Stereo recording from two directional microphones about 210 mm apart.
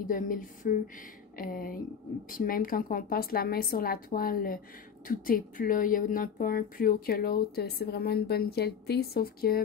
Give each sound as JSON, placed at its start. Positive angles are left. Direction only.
{"t": 0.0, "sound": "speech", "side_deg": 40}